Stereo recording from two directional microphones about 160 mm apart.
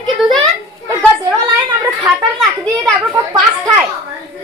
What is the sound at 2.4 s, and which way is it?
Speech, 5° right (ahead or behind).